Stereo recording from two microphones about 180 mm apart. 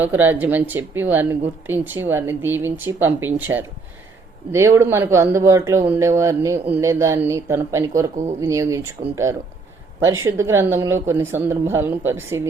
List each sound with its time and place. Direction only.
0.0 s speech: 10° right (ahead or behind)
4.5 s speech: 15° right (ahead or behind)